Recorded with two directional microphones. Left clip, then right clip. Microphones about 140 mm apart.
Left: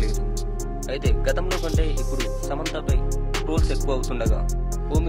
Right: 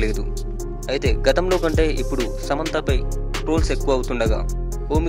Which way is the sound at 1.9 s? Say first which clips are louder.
Right 5 dB; centre (ahead or behind).